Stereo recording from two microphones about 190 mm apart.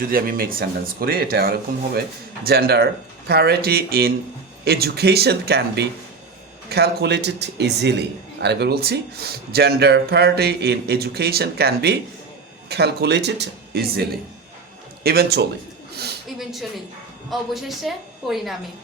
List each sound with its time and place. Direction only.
0.1 s a man's voice: 50° right (ahead or behind)
15.0 s a man's voice: 55° right (ahead or behind)
16.4 s a woman's voice: centre (ahead or behind)